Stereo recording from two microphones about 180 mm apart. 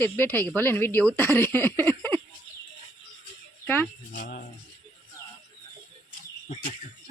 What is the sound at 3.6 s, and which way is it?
Speech, 10° left (ahead or behind).